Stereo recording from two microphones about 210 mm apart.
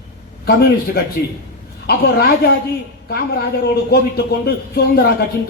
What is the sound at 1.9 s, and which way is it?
Speech, 50° left (ahead or behind).